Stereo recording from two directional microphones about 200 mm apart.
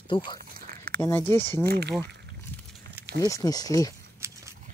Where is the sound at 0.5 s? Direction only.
50° right (ahead or behind).